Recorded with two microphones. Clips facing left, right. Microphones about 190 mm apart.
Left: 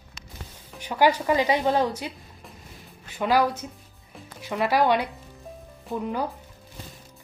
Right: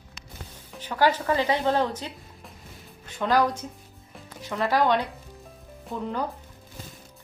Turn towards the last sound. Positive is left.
turn(degrees=10)  # may be behind; listen again after turning